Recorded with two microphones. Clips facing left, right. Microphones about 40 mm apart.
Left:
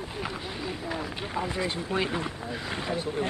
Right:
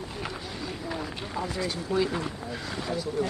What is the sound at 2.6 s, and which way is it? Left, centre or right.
Speech, left.